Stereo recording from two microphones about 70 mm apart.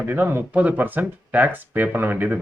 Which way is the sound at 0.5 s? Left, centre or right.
Centre.